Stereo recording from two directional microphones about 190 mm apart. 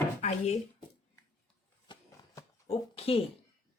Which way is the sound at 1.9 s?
25° left (ahead or behind).